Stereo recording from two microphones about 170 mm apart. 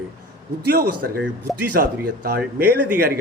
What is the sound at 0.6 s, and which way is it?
Speech, 65° right (ahead or behind).